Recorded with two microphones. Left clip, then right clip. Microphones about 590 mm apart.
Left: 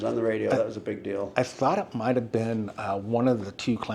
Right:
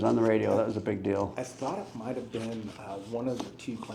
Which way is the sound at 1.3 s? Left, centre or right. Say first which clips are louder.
Left 10 dB; left.